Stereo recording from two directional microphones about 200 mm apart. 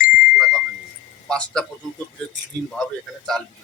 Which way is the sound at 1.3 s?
5° left (ahead or behind).